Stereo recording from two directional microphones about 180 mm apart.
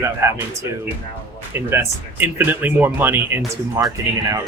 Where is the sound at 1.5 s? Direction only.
15° right (ahead or behind).